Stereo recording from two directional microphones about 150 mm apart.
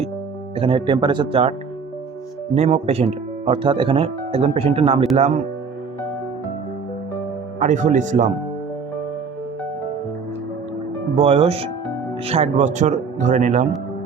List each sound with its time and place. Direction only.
0.5 s speech: 40° right (ahead or behind)
2.6 s speech: 45° right (ahead or behind)
7.6 s speech: 55° right (ahead or behind)
11.2 s speech: 40° right (ahead or behind)